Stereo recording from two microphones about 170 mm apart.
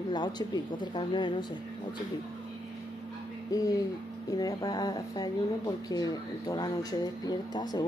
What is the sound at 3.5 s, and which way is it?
Speech, 20° left (ahead or behind).